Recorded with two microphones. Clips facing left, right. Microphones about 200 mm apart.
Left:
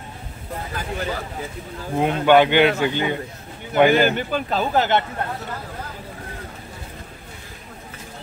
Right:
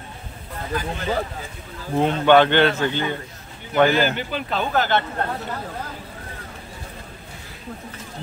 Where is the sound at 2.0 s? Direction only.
10° left (ahead or behind).